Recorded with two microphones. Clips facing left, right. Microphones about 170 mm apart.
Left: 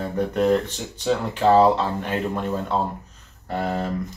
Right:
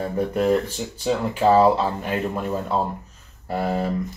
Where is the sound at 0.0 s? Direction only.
5° right (ahead or behind).